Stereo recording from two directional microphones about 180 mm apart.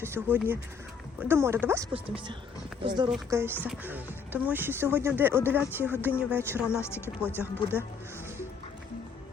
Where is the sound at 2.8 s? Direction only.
25° right (ahead or behind).